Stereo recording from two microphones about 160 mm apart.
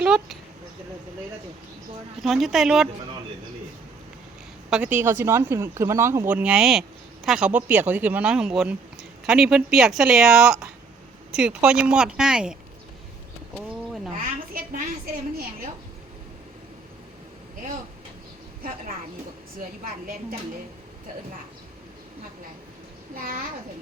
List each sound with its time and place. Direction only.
0.0 s a sound: centre (ahead or behind)
2.2 s speech: centre (ahead or behind)
4.7 s speech: 10° right (ahead or behind)
19.5 s a woman's voice: 60° right (ahead or behind)